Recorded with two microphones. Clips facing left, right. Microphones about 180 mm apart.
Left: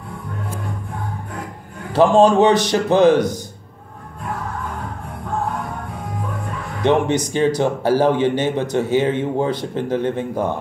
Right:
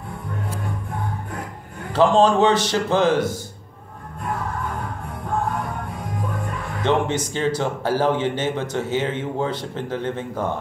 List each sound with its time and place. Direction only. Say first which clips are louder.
1.9 s speech: left 3 dB; 15° left (ahead or behind)
6.8 s speech: left 4 dB; 15° left (ahead or behind)